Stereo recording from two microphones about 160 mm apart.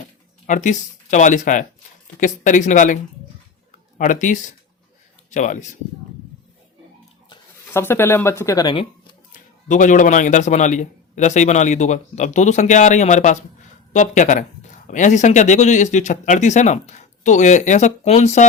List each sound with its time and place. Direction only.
0.4 s speech: 50° left (ahead or behind)
7.7 s speech: 15° left (ahead or behind); by 8.9 s 30° left (ahead or behind)
9.3 s speech: 55° left (ahead or behind)